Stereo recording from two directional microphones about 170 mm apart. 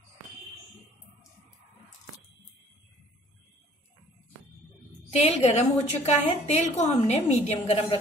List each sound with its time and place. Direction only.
5.1 s a woman's voice: 40° left (ahead or behind)